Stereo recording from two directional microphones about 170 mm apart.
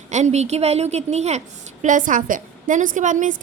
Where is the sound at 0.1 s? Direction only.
40° right (ahead or behind).